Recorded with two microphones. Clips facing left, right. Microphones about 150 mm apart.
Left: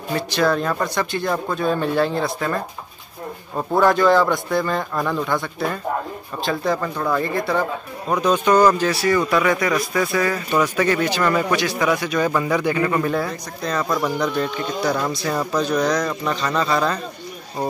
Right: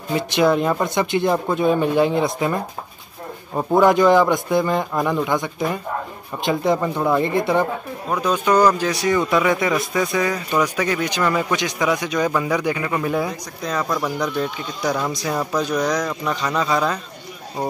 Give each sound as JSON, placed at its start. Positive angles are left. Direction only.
{"t": 0.1, "sound": "a man's voice", "side_deg": -20}
{"t": 8.2, "sound": "a man's voice", "side_deg": -10}
{"t": 14.8, "sound": "a man's voice", "side_deg": -15}